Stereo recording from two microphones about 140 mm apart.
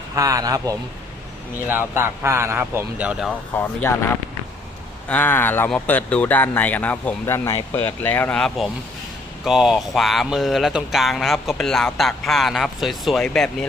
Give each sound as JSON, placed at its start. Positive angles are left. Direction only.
{"t": 0.2, "sound": "a man's voice", "side_deg": -25}
{"t": 3.6, "sound": "speech", "side_deg": 15}
{"t": 5.0, "sound": "speech", "side_deg": 10}